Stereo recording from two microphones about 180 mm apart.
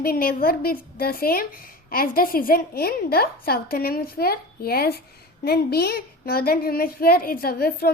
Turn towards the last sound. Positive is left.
turn(degrees=60)  # may be behind; listen again after turning